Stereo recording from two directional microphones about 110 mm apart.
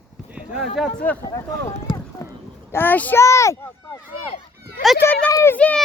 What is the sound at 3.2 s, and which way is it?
Speech, 25° left (ahead or behind).